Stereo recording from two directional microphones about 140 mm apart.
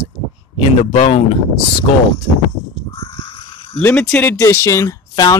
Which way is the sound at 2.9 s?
40° left (ahead or behind).